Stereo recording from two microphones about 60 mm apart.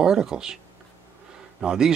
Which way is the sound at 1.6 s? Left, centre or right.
Centre.